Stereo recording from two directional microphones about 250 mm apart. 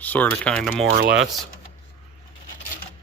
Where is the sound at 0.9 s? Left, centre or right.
Right.